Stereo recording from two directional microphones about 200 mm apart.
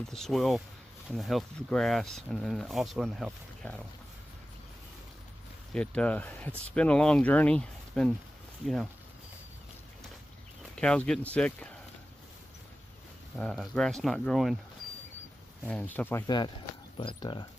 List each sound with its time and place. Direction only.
0.1 s speech: centre (ahead or behind)
5.7 s speech: 5° left (ahead or behind)
10.8 s speech: 5° left (ahead or behind)
13.4 s speech: centre (ahead or behind)
15.7 s speech: 10° left (ahead or behind)
16.9 s speech: 25° left (ahead or behind)